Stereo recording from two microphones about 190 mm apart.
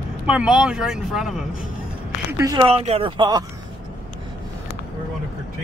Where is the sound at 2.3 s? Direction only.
20° right (ahead or behind).